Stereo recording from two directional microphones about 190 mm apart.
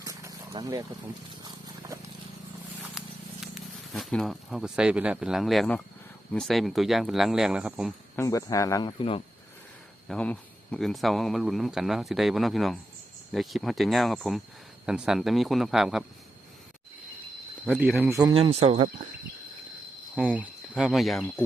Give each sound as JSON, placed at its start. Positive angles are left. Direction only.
{"t": 0.0, "sound": "vehicle", "side_deg": -20}
{"t": 0.5, "sound": "speech", "side_deg": -20}
{"t": 1.5, "sound": "a sound", "side_deg": -15}
{"t": 3.0, "sound": "a sound", "side_deg": 0}
{"t": 3.4, "sound": "speech", "side_deg": 0}
{"t": 8.1, "sound": "speech", "side_deg": 15}
{"t": 10.1, "sound": "speech", "side_deg": 5}
{"t": 17.7, "sound": "speech", "side_deg": -5}
{"t": 18.3, "sound": "speech", "side_deg": -30}
{"t": 20.1, "sound": "speech", "side_deg": -10}